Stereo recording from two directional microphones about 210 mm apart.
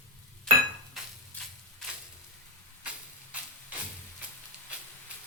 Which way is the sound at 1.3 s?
5° left (ahead or behind).